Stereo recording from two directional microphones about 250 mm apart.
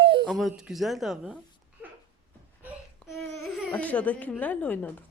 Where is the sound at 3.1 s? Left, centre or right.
Centre.